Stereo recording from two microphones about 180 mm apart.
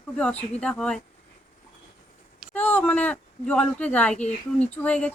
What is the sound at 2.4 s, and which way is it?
Speech, 5° left (ahead or behind).